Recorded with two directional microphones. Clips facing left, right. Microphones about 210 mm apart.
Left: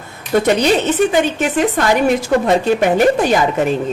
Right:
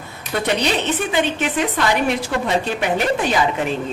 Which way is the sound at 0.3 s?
45° left (ahead or behind).